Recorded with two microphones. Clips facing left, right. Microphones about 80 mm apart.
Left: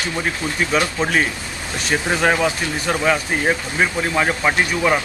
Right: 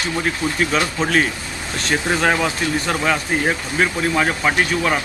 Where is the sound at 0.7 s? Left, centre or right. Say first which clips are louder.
Left 2 dB; centre.